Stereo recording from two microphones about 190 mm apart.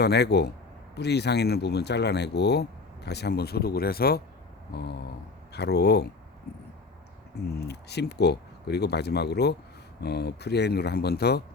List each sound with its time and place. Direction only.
0.0 s speech: 60° left (ahead or behind)
7.3 s speech: 60° left (ahead or behind)